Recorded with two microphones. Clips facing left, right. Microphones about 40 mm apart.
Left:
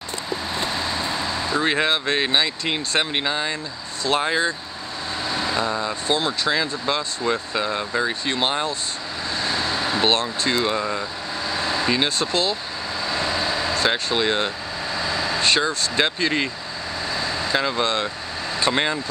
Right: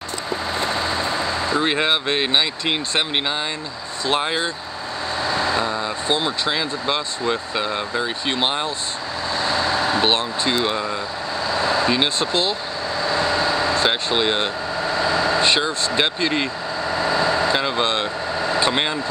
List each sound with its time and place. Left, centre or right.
1.5 s speech: right
6.0 s speech: right
9.9 s speech: right
12.0 s speech: right
13.1 s vehicle: right
14.0 s speech: right
17.0 s vehicle: right
17.6 s speech: right
18.7 s speech: centre